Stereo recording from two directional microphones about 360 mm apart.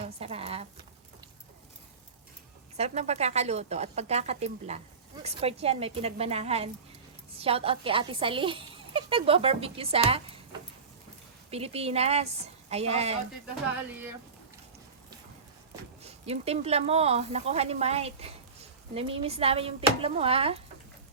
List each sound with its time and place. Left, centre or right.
0.0 s a sound: centre
2.7 s speech: centre
11.5 s speech: centre
15.7 s speech: centre